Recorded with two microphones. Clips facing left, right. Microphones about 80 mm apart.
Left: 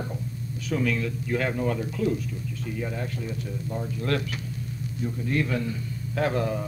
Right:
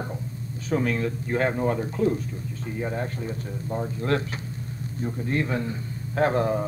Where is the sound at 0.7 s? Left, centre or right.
Right.